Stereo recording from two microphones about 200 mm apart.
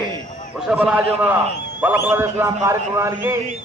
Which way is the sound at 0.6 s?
5° right (ahead or behind).